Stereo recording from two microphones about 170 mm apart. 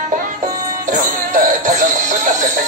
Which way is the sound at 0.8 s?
50° right (ahead or behind).